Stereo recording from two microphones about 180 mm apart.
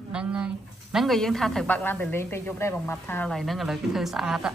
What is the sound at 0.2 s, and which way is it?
Speech, 5° right (ahead or behind).